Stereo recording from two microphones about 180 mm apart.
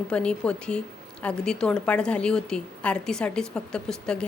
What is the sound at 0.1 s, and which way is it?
A woman's voice, 5° left (ahead or behind).